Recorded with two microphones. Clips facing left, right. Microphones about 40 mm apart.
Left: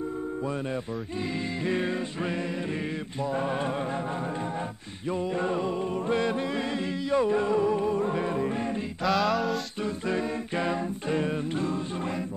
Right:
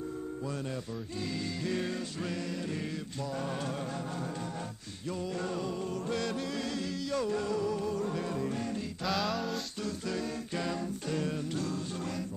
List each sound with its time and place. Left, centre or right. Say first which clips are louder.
1.6 s music: left 7 dB; left
3.3 s music: left 7 dB; left
5.1 s music: left 7 dB; left
9.0 s music: left 8 dB; centre
9.8 s a capella: left 7 dB; left